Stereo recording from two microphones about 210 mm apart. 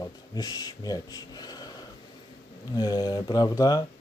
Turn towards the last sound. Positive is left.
turn(degrees=15)  # may be behind; listen again after turning